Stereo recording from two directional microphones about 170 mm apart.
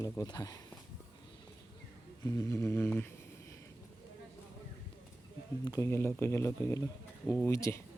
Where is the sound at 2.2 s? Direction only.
20° left (ahead or behind).